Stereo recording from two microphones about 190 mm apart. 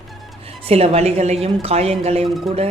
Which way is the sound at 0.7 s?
30° right (ahead or behind).